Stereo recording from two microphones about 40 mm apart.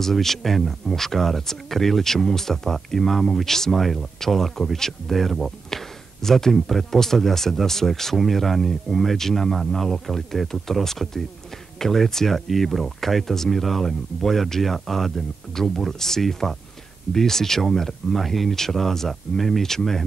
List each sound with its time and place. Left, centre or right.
0.0 s speech: centre